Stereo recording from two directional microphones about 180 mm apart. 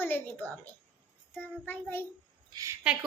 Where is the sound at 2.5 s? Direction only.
20° right (ahead or behind).